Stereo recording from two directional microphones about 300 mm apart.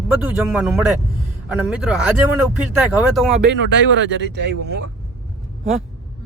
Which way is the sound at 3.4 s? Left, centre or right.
Right.